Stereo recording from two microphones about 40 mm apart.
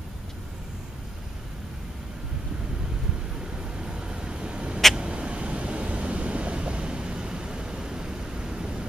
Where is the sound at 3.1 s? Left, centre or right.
Right.